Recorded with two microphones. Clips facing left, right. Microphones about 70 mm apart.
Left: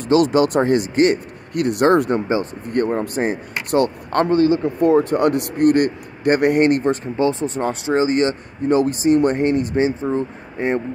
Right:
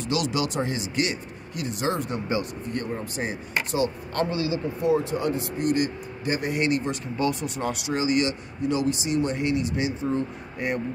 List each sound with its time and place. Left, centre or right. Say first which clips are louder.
0.0 s speech: left 11 dB; left
7.2 s speech: left 7 dB; left